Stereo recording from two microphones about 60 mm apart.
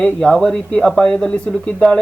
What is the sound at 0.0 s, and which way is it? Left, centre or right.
Speech, centre.